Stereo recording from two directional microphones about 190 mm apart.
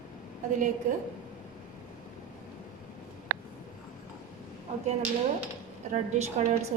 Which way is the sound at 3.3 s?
55° right (ahead or behind).